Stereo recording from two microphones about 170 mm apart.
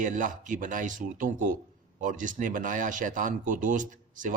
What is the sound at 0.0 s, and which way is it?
A man's voice, 50° right (ahead or behind).